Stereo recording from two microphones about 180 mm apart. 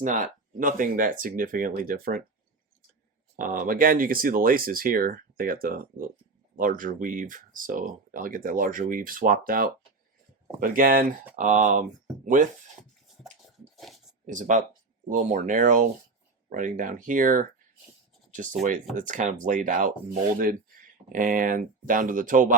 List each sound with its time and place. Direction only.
0.0 s speech: 45° right (ahead or behind)
3.3 s speech: 50° right (ahead or behind)
13.7 s a sound: centre (ahead or behind)
14.3 s speech: 45° right (ahead or behind)
18.9 s speech: 45° right (ahead or behind)